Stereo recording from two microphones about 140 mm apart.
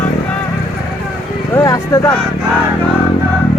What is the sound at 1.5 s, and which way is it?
Vehicle, 25° left (ahead or behind).